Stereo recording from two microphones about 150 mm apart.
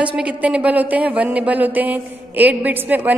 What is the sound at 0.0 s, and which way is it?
Speech, 10° right (ahead or behind).